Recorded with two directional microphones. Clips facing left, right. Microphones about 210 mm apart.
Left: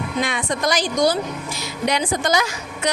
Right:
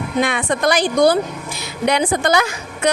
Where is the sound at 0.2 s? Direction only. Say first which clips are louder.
Right 5 dB; 60° right (ahead or behind).